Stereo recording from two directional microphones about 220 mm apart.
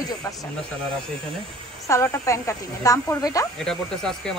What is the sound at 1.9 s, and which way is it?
A woman's voice, 10° left (ahead or behind).